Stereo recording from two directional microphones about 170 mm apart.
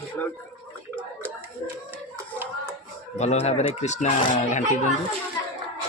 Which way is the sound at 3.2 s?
40° left (ahead or behind).